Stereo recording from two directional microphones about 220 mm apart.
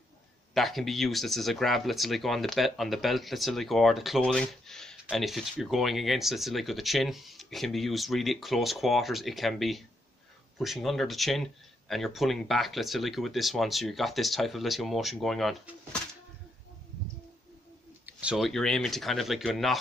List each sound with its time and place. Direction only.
0.6 s speech: centre (ahead or behind)
18.0 s speech: 5° right (ahead or behind)